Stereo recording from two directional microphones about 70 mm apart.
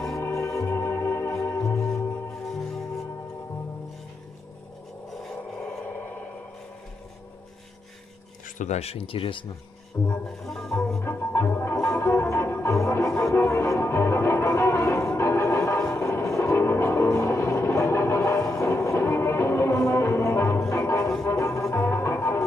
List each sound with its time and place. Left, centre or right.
0.1 s music: left
2.5 s music: centre
5.1 s vehicle: centre
10.2 s music: centre
11.1 s music: left